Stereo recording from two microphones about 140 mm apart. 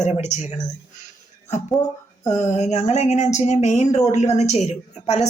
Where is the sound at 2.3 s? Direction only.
55° left (ahead or behind).